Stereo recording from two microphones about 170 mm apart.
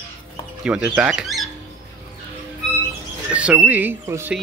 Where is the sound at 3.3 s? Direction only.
10° right (ahead or behind).